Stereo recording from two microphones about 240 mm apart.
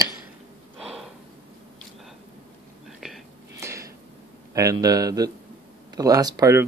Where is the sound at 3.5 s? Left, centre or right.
Centre.